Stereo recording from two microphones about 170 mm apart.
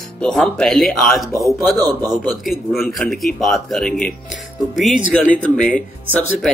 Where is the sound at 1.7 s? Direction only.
20° right (ahead or behind).